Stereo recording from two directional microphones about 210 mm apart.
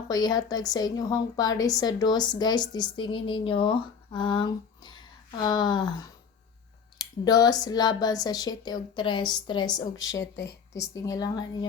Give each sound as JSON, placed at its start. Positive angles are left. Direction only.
{"t": 0.1, "sound": "a woman's voice", "side_deg": 20}